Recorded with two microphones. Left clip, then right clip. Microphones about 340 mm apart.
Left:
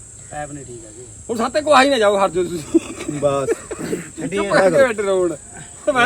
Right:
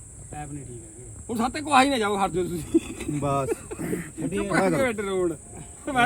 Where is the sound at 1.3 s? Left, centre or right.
Centre.